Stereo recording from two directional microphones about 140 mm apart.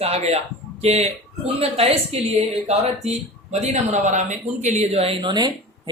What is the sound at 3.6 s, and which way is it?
A man's voice, 55° right (ahead or behind).